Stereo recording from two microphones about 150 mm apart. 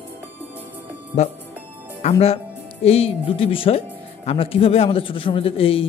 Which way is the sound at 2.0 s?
45° left (ahead or behind).